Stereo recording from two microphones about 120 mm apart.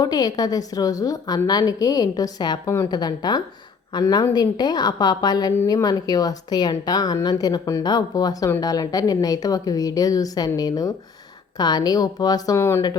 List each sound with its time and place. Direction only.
0.0 s a woman's voice: 30° left (ahead or behind)
12.5 s speech: 20° left (ahead or behind)